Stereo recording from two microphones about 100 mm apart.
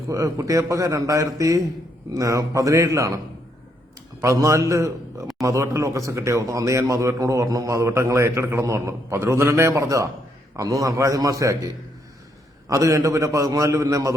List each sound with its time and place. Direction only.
0.1 s a man's voice: 35° right (ahead or behind)
4.2 s a man's voice: 30° right (ahead or behind)